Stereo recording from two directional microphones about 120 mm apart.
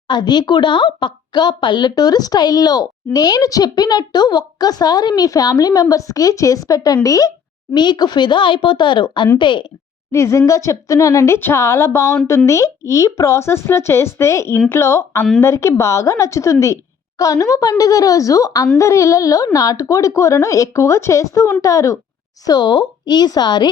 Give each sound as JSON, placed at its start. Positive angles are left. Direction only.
{"t": 0.1, "sound": "speech", "side_deg": 35}
{"t": 10.1, "sound": "speech", "side_deg": 25}